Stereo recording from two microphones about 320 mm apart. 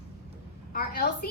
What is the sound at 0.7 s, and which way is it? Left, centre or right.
Speech, left.